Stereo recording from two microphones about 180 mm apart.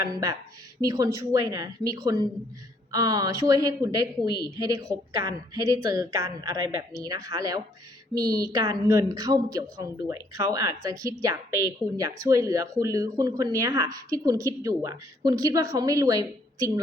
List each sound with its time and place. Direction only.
0.1 s a woman's voice: 20° right (ahead or behind)